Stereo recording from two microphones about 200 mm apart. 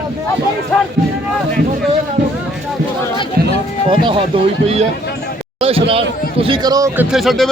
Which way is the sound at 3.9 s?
25° right (ahead or behind).